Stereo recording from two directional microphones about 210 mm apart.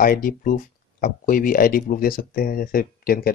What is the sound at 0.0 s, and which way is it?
Speech, 40° left (ahead or behind).